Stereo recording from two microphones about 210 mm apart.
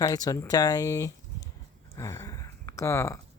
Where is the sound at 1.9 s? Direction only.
15° left (ahead or behind).